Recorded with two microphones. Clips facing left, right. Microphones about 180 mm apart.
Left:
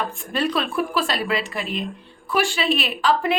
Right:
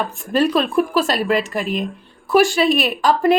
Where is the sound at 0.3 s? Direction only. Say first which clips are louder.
Right 7 dB; 40° right (ahead or behind).